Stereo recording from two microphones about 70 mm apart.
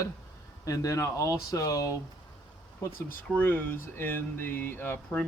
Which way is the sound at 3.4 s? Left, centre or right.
Left.